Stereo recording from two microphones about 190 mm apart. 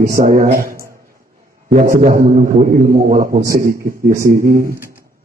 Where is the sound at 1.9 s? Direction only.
45° right (ahead or behind).